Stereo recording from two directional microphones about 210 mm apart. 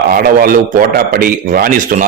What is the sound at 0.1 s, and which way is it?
A man's voice, 40° right (ahead or behind).